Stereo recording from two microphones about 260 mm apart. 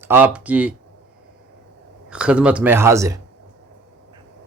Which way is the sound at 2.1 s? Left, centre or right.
Centre.